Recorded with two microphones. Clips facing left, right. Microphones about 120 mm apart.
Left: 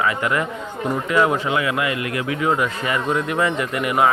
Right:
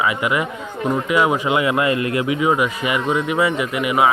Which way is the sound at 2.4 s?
10° right (ahead or behind).